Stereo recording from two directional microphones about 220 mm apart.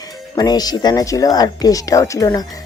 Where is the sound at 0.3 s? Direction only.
15° left (ahead or behind).